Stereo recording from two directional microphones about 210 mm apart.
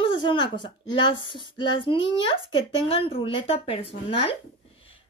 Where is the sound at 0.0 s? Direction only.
25° left (ahead or behind).